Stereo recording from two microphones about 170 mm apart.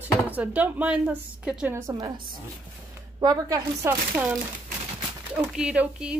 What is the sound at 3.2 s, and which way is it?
Speech, 20° right (ahead or behind).